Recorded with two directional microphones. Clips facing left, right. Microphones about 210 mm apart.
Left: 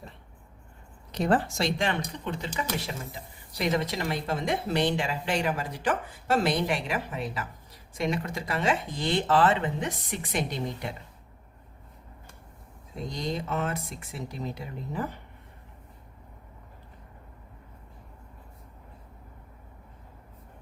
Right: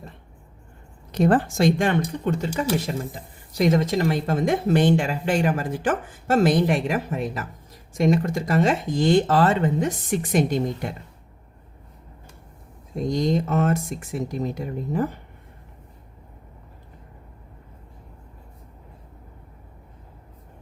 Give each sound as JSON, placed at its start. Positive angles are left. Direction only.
{"t": 1.1, "sound": "speech", "side_deg": -50}
{"t": 13.1, "sound": "speech", "side_deg": -45}